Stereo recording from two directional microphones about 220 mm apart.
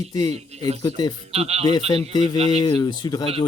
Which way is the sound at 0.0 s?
15° left (ahead or behind).